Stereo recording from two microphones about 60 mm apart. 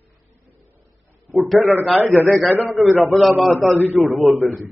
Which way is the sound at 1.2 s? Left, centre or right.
Centre.